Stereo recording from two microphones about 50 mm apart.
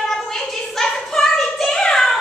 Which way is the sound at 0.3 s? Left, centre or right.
Centre.